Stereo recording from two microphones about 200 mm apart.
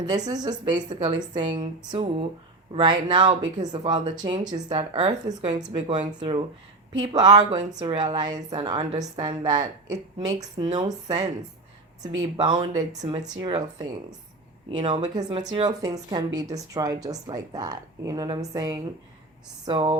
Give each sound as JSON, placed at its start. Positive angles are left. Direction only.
{"t": 0.0, "sound": "a woman's voice", "side_deg": -20}
{"t": 13.0, "sound": "a woman's voice", "side_deg": -20}